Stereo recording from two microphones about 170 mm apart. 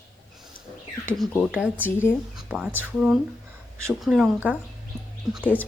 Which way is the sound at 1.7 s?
15° left (ahead or behind).